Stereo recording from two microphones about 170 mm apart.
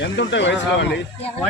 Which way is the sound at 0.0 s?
90° left.